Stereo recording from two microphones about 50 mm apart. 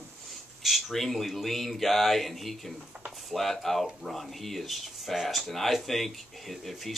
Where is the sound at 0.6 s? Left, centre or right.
Centre.